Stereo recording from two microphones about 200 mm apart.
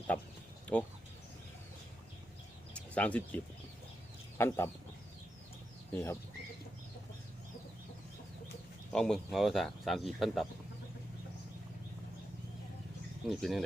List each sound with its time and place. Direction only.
2.9 s speech: 5° left (ahead or behind)
5.9 s speech: 10° left (ahead or behind)
8.9 s speech: 5° left (ahead or behind)
13.2 s speech: centre (ahead or behind)